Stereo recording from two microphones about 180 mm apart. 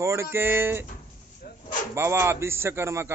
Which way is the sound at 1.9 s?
15° right (ahead or behind).